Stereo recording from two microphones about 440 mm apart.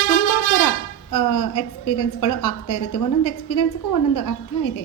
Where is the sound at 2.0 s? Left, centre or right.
Left.